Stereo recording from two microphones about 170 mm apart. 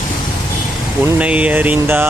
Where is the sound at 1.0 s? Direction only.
10° right (ahead or behind).